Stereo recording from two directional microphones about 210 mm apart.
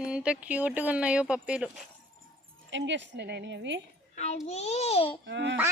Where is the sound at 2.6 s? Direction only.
60° right (ahead or behind).